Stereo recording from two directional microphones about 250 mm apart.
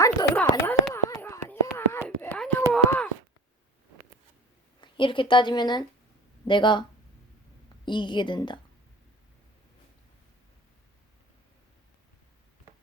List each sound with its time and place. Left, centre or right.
0.0 s a sound: centre
4.8 s a woman's voice: centre
7.9 s a woman's voice: centre